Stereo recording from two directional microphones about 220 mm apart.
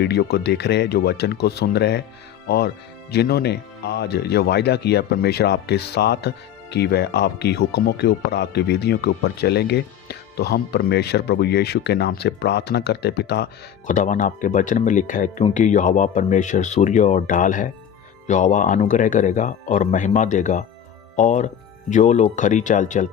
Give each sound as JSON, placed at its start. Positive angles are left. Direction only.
{"t": 0.0, "sound": "speech", "side_deg": 50}
{"t": 13.8, "sound": "speech", "side_deg": 35}